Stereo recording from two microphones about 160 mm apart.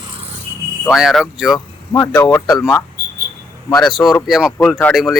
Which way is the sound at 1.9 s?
15° left (ahead or behind).